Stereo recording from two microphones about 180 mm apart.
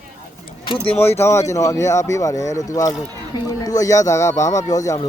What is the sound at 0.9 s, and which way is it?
Speech, 15° left (ahead or behind).